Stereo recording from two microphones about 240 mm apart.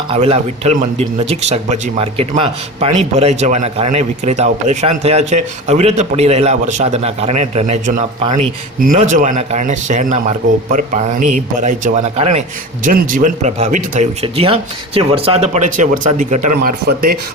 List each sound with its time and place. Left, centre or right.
0.1 s a man's voice: right